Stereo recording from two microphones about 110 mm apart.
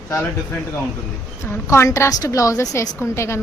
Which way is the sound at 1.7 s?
25° left (ahead or behind).